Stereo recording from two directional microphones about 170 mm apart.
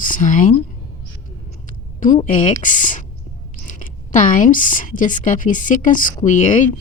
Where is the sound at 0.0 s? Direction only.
50° left (ahead or behind).